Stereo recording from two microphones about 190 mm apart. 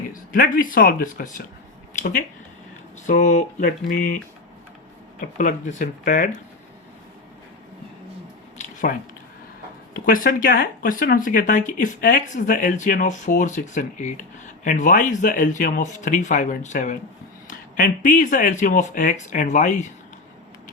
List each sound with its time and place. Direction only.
0.1 s speech: 50° left (ahead or behind)
5.2 s speech: 45° left (ahead or behind)
8.5 s a sound: 45° left (ahead or behind)
9.9 s speech: 50° left (ahead or behind)